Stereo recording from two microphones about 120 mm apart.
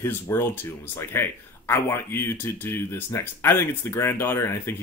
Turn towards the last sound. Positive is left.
turn(degrees=20)  # may be behind; listen again after turning